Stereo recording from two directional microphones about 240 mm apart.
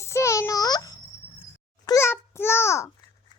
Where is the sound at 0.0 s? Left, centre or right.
Centre.